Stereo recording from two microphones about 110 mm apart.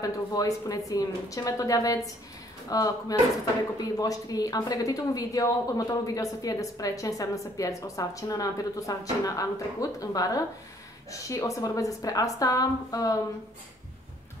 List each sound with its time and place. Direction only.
0.0 s speech: 30° left (ahead or behind)